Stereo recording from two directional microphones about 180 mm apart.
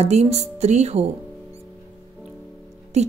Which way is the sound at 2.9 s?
40° right (ahead or behind).